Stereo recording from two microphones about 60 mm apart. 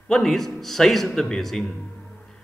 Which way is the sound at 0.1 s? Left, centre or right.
Centre.